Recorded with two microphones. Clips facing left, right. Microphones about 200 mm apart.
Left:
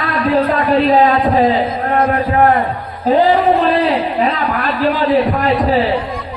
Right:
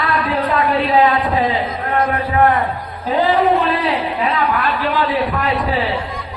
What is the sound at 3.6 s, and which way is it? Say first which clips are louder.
A man's voice: left 4 dB; 40° left (ahead or behind).